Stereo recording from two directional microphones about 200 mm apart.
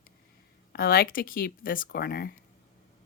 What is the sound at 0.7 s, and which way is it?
Speech, 50° left (ahead or behind).